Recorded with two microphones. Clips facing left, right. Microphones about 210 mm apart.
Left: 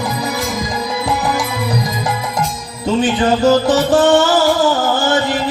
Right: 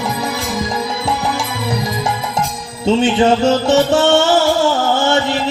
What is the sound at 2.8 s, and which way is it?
Music, 25° right (ahead or behind).